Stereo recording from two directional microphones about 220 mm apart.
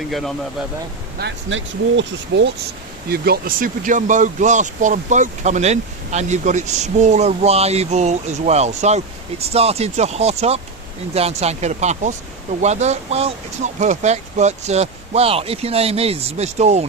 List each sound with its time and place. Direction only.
0.1 s speech: centre (ahead or behind)
1.2 s speech: 60° right (ahead or behind)
3.1 s speech: 45° right (ahead or behind)